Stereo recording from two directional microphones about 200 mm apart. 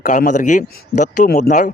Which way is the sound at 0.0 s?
40° left (ahead or behind).